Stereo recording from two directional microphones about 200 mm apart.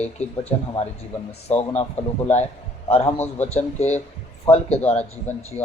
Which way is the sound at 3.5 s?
35° left (ahead or behind).